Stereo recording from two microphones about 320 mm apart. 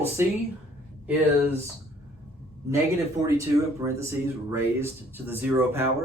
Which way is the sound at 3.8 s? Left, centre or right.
Centre.